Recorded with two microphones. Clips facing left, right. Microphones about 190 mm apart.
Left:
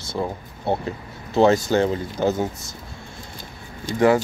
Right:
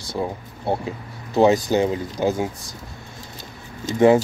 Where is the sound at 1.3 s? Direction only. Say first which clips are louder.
Even; 15° right (ahead or behind).